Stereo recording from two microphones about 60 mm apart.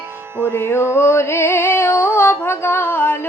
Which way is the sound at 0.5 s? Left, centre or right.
Left.